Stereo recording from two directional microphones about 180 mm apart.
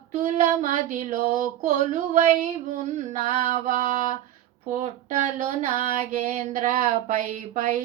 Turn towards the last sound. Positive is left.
turn(degrees=-45)  # may be behind; listen again after turning